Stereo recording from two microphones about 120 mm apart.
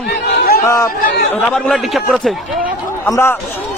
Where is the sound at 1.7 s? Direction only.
Centre (ahead or behind).